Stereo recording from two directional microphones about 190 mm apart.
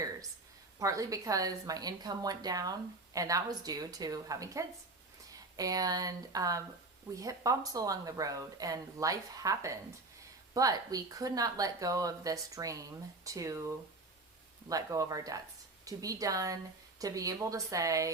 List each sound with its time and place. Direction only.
0.8 s a woman's voice: 15° right (ahead or behind)